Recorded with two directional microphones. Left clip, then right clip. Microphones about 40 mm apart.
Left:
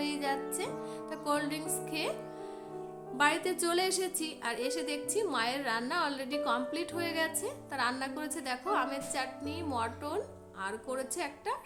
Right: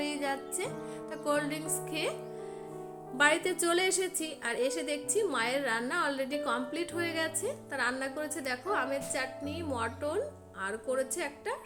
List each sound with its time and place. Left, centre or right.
0.0 s speech: right
1.1 s music: right
3.2 s a woman's voice: right
7.7 s a woman's voice: centre
8.0 s a woman's voice: right